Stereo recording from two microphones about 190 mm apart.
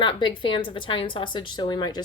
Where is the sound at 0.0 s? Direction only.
25° left (ahead or behind).